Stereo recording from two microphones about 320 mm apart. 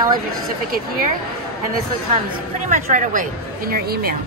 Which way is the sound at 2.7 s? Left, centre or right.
Right.